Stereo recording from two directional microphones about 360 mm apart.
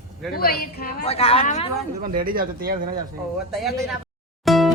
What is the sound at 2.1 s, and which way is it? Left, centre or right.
Speech, right.